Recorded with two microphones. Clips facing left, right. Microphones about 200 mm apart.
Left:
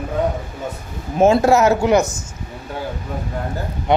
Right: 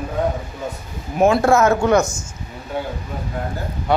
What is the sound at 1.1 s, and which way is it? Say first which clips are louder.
Speech: left 2 dB; 25° left (ahead or behind).